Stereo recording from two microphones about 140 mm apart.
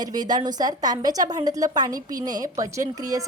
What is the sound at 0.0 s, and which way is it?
A woman's voice, 30° right (ahead or behind).